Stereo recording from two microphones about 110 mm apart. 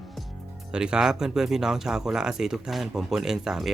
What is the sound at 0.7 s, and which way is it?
Speech, 5° right (ahead or behind).